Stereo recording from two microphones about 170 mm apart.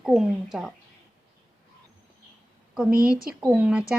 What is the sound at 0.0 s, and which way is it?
Speech, 5° right (ahead or behind).